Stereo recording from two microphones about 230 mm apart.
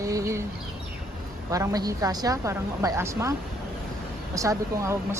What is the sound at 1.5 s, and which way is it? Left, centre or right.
Speech, centre.